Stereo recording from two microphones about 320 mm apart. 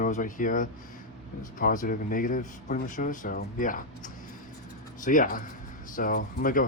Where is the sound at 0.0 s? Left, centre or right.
Left.